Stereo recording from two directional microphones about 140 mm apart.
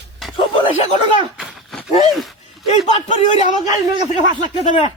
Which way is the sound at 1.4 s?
Centre (ahead or behind).